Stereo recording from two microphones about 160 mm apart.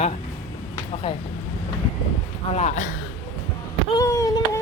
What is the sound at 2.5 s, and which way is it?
Speech, 50° left (ahead or behind).